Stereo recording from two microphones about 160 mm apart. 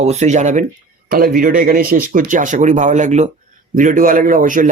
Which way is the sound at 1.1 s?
65° right (ahead or behind).